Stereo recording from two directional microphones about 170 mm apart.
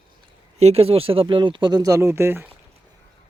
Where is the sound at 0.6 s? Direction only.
35° right (ahead or behind); by 2.5 s 15° right (ahead or behind).